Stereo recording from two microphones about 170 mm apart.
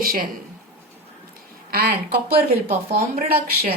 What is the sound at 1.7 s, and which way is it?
Speech, 65° right (ahead or behind).